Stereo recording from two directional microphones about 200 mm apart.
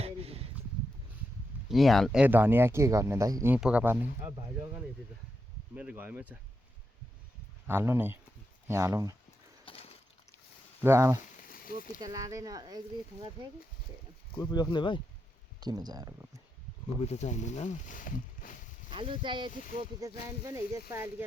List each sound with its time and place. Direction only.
0.0 s a sound: 30° right (ahead or behind)
1.7 s speech: centre (ahead or behind)
5.7 s speech: 5° right (ahead or behind)
7.7 s speech: 10° right (ahead or behind)
9.6 s a sound: 30° left (ahead or behind)
10.8 s speech: 15° right (ahead or behind)
11.4 s a sound: 45° left (ahead or behind)
11.9 s speech: 20° right (ahead or behind)
14.5 s speech: 20° left (ahead or behind)
15.6 s speech: 20° right (ahead or behind)
17.0 s speech: 35° left (ahead or behind)
18.9 s speech: 25° right (ahead or behind)